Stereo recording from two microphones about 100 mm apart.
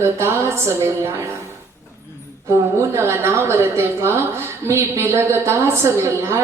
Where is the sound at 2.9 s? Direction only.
25° right (ahead or behind).